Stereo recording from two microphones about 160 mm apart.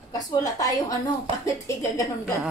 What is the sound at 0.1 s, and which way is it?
A woman's voice, 25° left (ahead or behind).